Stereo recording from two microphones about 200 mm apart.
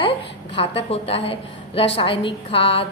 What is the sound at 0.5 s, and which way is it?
A woman's voice, 30° left (ahead or behind).